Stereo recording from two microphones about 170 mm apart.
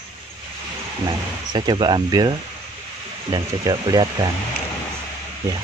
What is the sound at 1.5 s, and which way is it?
Speech, 25° right (ahead or behind).